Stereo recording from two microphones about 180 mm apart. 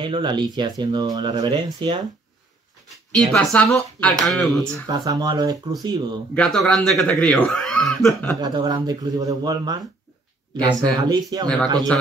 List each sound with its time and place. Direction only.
0.0 s speech: 25° right (ahead or behind)
3.5 s speech: 10° left (ahead or behind)
4.8 s speech: 20° right (ahead or behind)
6.3 s speech: 5° left (ahead or behind)
8.4 s speech: 25° right (ahead or behind)